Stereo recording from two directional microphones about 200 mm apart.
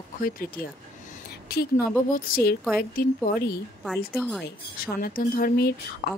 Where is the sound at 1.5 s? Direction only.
50° left (ahead or behind).